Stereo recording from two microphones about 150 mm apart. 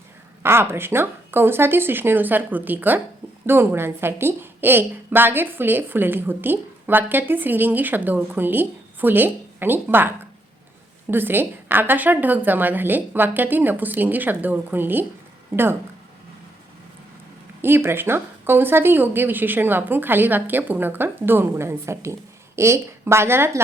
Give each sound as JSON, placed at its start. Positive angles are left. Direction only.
{"t": 0.4, "sound": "a woman's voice", "side_deg": -15}
{"t": 11.1, "sound": "a woman's voice", "side_deg": -15}
{"t": 17.6, "sound": "a woman's voice", "side_deg": -15}